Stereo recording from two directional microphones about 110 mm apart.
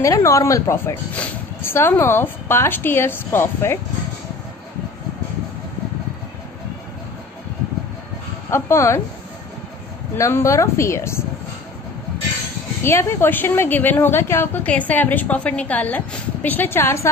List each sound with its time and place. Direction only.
0.0 s speech: 30° left (ahead or behind)
1.1 s speech: 15° left (ahead or behind)
8.5 s speech: 25° left (ahead or behind)
10.1 s speech: 25° left (ahead or behind)
12.8 s a woman's voice: 20° left (ahead or behind)